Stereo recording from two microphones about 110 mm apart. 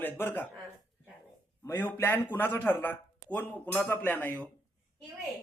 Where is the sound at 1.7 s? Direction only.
15° left (ahead or behind).